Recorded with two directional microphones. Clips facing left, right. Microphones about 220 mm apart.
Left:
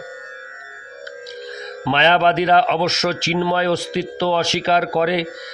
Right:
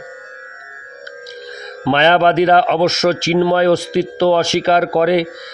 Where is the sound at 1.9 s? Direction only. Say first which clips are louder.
Right 4 dB; 50° right (ahead or behind).